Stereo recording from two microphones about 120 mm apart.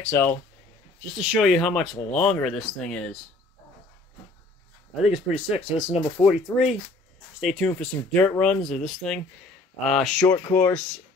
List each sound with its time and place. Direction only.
0.0 s speech: 20° left (ahead or behind)
1.1 s speech: 5° right (ahead or behind)
5.0 s speech: 10° right (ahead or behind)
5.9 s speech: 40° left (ahead or behind)
6.5 s speech: 5° right (ahead or behind)
10.5 s speech: 15° left (ahead or behind)